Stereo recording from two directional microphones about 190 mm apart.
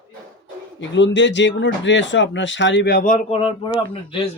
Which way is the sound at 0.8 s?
70° left (ahead or behind).